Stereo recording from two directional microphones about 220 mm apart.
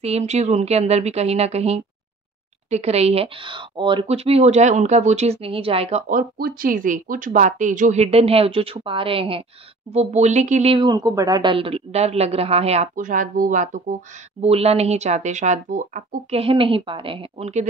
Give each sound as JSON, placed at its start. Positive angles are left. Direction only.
{"t": 0.0, "sound": "speech", "side_deg": -30}